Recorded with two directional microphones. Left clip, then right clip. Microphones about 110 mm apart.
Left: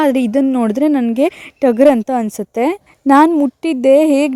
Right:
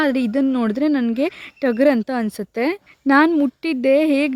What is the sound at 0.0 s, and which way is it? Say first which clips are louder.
A woman's voice: left 5 dB; 35° left (ahead or behind).